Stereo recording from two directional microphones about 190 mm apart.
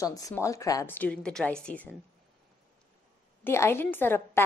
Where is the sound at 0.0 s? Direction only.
15° left (ahead or behind).